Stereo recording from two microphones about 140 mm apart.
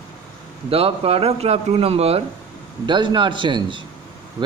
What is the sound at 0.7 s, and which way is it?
A man's voice, 45° right (ahead or behind).